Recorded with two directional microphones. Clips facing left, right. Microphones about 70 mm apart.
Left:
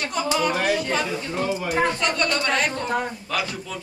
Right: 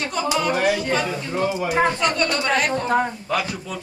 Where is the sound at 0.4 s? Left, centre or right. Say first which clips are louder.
Right 2 dB; centre.